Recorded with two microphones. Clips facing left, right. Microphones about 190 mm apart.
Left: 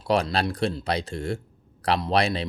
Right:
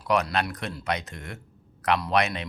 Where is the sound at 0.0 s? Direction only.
30° left (ahead or behind).